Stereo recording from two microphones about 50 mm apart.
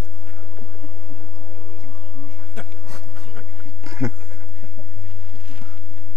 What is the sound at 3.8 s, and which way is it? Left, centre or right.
Goat, right.